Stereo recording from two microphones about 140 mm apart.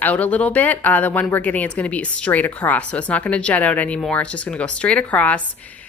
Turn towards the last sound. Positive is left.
turn(degrees=10)  # may be behind; listen again after turning